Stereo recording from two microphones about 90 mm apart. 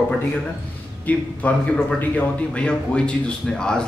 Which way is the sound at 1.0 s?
15° left (ahead or behind).